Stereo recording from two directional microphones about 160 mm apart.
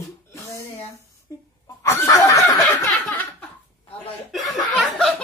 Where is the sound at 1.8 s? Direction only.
20° left (ahead or behind).